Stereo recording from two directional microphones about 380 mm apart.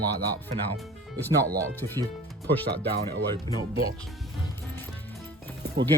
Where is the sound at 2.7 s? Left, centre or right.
Right.